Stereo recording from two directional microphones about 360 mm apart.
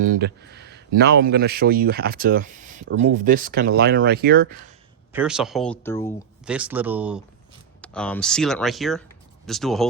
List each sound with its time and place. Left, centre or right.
0.0 s speech: right
5.1 s speech: centre